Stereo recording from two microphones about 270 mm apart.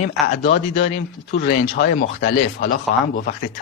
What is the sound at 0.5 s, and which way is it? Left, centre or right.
A man's voice, left.